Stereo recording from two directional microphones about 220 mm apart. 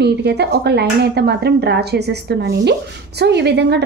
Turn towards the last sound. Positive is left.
turn(degrees=-50)  # may be behind; listen again after turning